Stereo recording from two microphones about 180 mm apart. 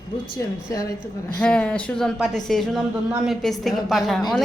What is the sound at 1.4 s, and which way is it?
Speech, 5° left (ahead or behind).